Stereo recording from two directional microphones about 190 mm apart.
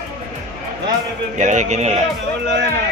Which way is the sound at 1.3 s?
40° right (ahead or behind).